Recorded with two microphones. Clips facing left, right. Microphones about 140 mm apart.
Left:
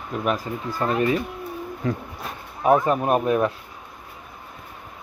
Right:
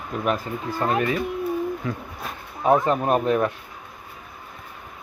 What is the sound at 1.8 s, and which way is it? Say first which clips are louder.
Speech: left 3 dB; 40° left (ahead or behind).